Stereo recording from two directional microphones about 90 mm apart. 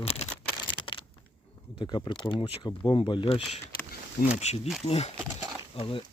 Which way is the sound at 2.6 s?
70° left (ahead or behind).